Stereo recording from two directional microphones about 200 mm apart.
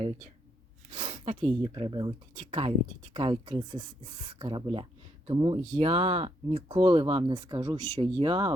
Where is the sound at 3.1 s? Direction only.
25° right (ahead or behind).